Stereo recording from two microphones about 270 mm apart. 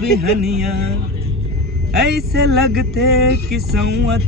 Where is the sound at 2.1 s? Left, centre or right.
Right.